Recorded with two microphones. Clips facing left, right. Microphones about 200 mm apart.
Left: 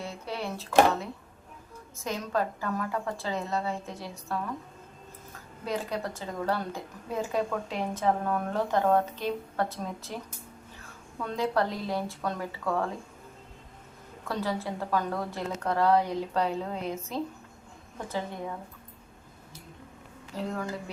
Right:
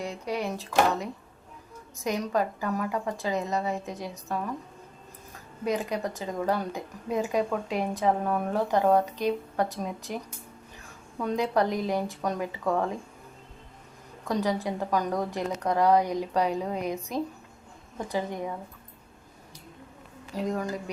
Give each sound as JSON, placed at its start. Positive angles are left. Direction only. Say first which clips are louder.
{"t": 0.0, "sound": "speech", "louder": "right 4 dB", "side_deg": -15}
{"t": 2.0, "sound": "a woman's voice", "louder": "right 3 dB", "side_deg": -15}
{"t": 5.6, "sound": "a woman's voice", "louder": "right 3 dB", "side_deg": -15}
{"t": 11.2, "sound": "a woman's voice", "louder": "right 3 dB", "side_deg": -15}
{"t": 14.3, "sound": "a woman's voice", "louder": "right 4 dB", "side_deg": -15}
{"t": 20.3, "sound": "a woman's voice", "louder": "right 3 dB", "side_deg": -15}